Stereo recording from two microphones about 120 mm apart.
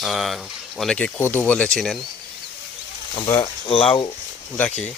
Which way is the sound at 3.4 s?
50° left (ahead or behind).